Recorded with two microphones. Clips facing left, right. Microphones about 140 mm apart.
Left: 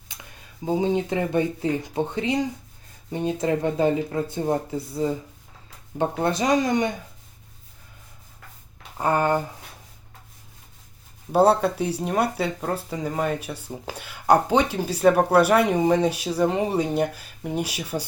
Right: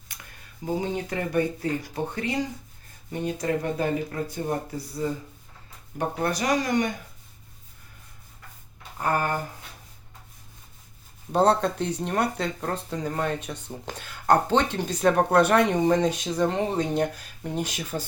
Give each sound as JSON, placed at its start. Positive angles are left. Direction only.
{"t": 0.6, "sound": "speech", "side_deg": 20}
{"t": 6.0, "sound": "speech", "side_deg": 25}
{"t": 9.0, "sound": "speech", "side_deg": 20}
{"t": 11.3, "sound": "speech", "side_deg": 10}